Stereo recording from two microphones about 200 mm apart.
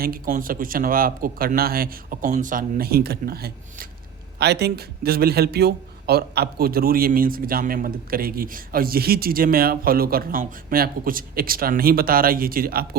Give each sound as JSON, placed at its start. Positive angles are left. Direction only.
{"t": 0.0, "sound": "speech", "side_deg": -45}